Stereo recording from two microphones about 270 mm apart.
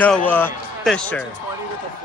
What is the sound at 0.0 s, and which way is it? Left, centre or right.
A man's voice, centre.